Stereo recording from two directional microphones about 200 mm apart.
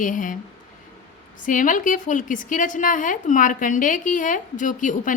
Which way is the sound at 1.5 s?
40° left (ahead or behind).